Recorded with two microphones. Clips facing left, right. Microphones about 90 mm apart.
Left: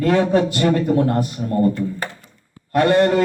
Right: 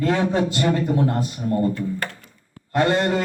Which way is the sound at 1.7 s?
5° left (ahead or behind).